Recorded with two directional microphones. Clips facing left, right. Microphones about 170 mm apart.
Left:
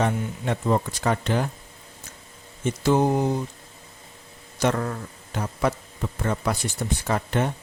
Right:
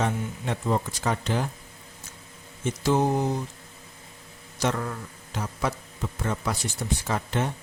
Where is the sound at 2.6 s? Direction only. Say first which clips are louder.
Left 3 dB; 60° left (ahead or behind).